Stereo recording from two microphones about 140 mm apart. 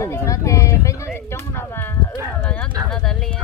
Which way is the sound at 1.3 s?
15° left (ahead or behind).